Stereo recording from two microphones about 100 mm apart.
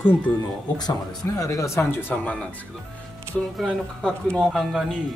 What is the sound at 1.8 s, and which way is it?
Speech, 20° left (ahead or behind).